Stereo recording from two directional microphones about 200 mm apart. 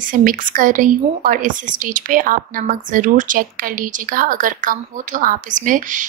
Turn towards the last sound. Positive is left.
turn(degrees=-40)  # may be behind; listen again after turning